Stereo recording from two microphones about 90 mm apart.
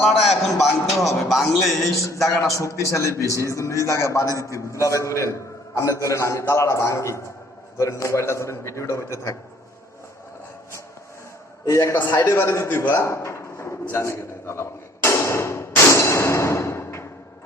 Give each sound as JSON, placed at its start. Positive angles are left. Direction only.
{"t": 0.0, "sound": "a man's voice", "side_deg": 0}
{"t": 2.0, "sound": "a man's voice", "side_deg": 35}
{"t": 11.6, "sound": "a man's voice", "side_deg": 35}
{"t": 13.9, "sound": "hammer", "side_deg": 30}